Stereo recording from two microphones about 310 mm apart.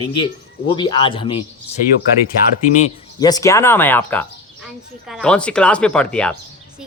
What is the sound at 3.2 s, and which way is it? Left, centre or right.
A woman's voice, centre.